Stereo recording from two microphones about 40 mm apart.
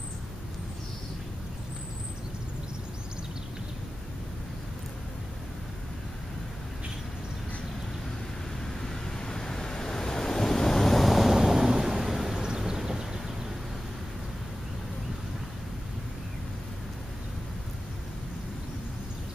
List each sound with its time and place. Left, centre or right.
8.8 s waves: centre
12.4 s vehicle: centre